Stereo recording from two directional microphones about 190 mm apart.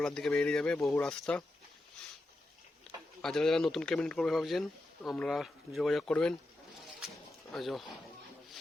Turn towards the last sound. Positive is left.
turn(degrees=0)  # may be behind; listen again after turning